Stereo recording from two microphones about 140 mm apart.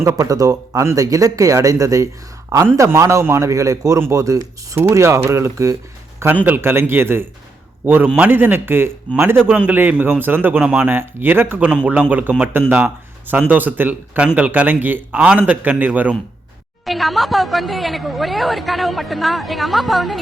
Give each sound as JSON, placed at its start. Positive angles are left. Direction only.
{"t": 0.0, "sound": "a man's voice", "side_deg": -25}
{"t": 16.8, "sound": "a woman's voice", "side_deg": 0}